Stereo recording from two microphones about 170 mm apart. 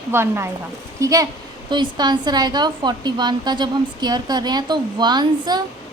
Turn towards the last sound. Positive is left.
turn(degrees=-25)  # may be behind; listen again after turning